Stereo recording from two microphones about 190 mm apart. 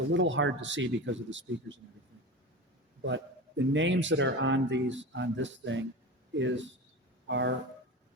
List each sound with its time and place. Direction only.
0.1 s speech: 75° right (ahead or behind)
3.6 s speech: 75° right (ahead or behind)